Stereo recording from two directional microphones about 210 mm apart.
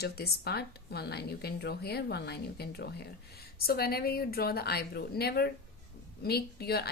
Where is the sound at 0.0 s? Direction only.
50° left (ahead or behind).